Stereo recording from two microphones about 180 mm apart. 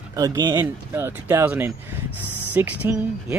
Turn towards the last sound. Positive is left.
turn(degrees=-10)  # may be behind; listen again after turning